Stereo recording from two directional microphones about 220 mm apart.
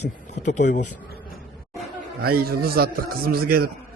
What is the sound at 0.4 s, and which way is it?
Speech, 35° left (ahead or behind).